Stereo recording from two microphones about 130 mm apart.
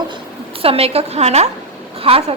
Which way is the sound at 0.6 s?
50° right (ahead or behind).